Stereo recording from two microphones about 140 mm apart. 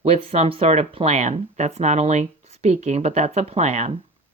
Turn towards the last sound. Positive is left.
turn(degrees=-50)  # may be behind; listen again after turning